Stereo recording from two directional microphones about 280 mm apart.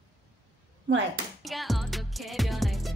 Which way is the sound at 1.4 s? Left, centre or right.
Centre.